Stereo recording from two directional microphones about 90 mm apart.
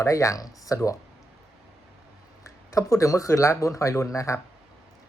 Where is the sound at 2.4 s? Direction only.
35° left (ahead or behind).